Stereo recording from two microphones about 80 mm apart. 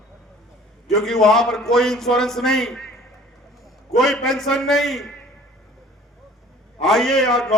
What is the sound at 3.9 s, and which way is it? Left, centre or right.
A man's voice, centre.